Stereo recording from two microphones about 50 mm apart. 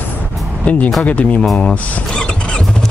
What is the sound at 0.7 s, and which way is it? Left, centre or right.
Speech, left.